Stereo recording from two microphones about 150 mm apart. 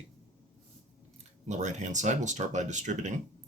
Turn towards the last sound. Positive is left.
turn(degrees=-55)  # may be behind; listen again after turning